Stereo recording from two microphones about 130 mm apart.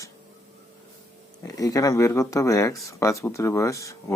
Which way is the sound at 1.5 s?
25° left (ahead or behind).